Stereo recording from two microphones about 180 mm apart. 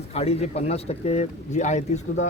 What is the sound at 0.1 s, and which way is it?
Speech, 35° left (ahead or behind).